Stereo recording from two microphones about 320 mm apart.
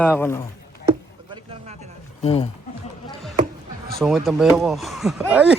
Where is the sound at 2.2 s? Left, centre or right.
Centre.